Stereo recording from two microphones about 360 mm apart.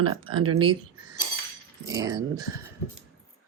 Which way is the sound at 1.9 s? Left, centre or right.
Centre.